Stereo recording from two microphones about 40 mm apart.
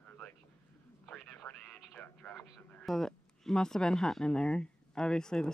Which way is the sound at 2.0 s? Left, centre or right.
Left.